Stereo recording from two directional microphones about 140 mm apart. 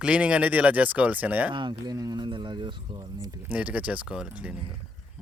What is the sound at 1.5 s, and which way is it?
Speech, 30° right (ahead or behind).